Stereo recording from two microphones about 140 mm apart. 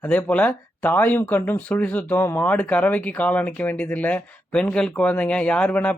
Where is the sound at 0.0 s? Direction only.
10° left (ahead or behind).